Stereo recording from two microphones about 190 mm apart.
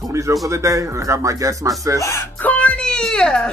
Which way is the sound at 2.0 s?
10° left (ahead or behind).